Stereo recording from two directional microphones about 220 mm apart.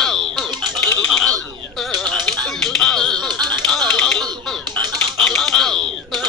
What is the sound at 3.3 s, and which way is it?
Music, 20° right (ahead or behind).